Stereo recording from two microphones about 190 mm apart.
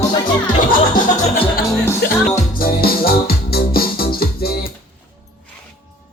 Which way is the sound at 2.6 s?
50° left (ahead or behind).